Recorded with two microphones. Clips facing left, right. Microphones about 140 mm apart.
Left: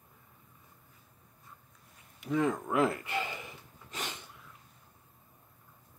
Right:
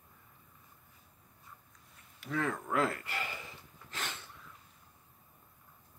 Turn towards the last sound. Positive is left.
turn(degrees=15)  # may be behind; listen again after turning